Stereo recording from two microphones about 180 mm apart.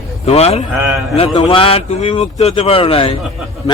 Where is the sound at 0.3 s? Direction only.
35° left (ahead or behind).